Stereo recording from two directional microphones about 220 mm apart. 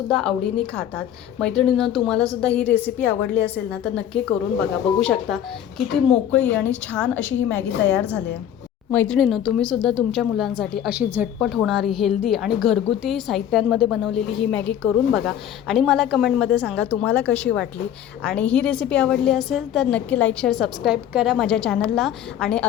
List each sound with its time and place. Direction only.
0.1 s a woman's voice: centre (ahead or behind)
1.4 s a woman's voice: 5° left (ahead or behind)